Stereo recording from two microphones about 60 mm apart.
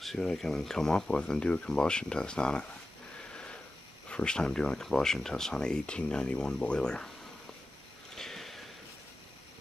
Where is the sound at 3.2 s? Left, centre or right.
Centre.